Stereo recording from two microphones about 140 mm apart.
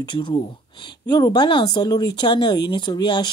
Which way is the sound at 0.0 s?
35° left (ahead or behind).